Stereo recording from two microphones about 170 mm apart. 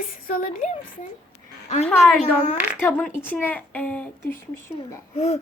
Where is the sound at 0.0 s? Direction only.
55° left (ahead or behind).